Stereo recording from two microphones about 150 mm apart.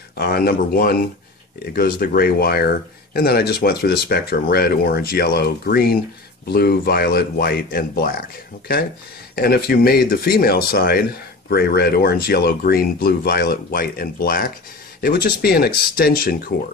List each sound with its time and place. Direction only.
0.2 s speech: 90° left
9.3 s speech: 90° left; by 14.5 s 75° left (ahead or behind)
15.0 s speech: 90° left